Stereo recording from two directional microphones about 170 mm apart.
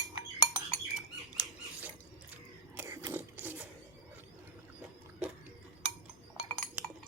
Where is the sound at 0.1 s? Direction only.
20° right (ahead or behind).